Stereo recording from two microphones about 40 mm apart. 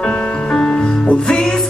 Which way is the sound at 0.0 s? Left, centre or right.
Left.